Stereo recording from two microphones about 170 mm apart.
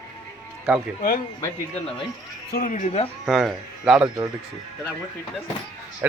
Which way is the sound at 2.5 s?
55° left (ahead or behind).